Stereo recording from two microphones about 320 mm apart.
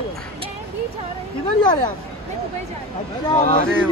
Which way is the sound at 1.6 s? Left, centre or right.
Centre.